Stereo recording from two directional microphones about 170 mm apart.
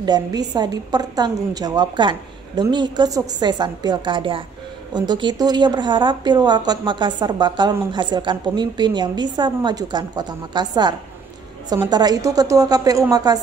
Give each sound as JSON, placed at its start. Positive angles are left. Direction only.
{"t": 0.0, "sound": "a woman's voice", "side_deg": -25}